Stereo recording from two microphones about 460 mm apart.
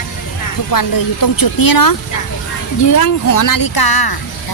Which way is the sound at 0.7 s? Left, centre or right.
Left.